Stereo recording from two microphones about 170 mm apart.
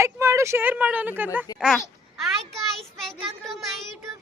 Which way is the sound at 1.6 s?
Centre (ahead or behind).